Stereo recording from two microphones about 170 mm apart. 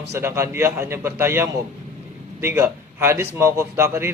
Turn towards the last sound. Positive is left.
turn(degrees=-15)  # may be behind; listen again after turning